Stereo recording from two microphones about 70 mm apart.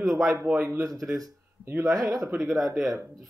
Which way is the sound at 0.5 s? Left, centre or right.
Right.